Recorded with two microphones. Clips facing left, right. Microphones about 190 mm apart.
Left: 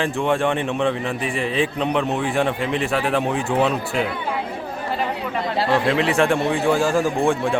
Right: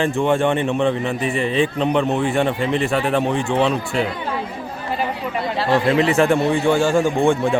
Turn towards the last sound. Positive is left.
turn(degrees=0)  # may be behind; listen again after turning